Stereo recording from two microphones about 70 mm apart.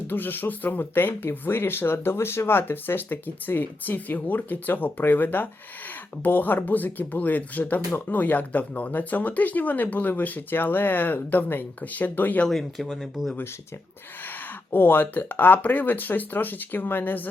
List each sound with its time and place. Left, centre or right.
0.1 s speech: left
12.5 s speech: centre
14.3 s speech: left